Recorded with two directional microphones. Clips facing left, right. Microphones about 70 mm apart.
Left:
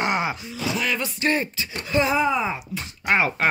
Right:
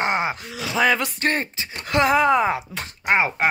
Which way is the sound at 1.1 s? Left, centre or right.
Right.